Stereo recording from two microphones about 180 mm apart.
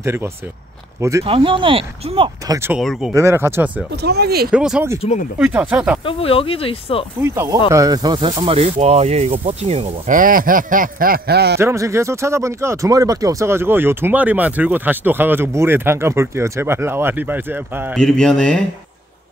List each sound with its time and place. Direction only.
0.0 s speech: 15° right (ahead or behind)
1.2 s speech: 30° right (ahead or behind)
2.4 s speech: 20° right (ahead or behind)
2.7 s speech: centre (ahead or behind)
3.1 s speech: 15° right (ahead or behind)
3.9 s speech: 65° right (ahead or behind)
4.5 s speech: 5° right (ahead or behind)
6.0 s speech: 30° left (ahead or behind)
7.2 s speech: 15° right (ahead or behind); by 11.5 s 60° right (ahead or behind)
11.5 s speech: 15° right (ahead or behind)
17.9 s speech: 5° left (ahead or behind)